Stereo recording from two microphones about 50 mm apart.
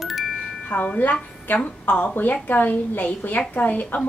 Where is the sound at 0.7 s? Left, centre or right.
Left.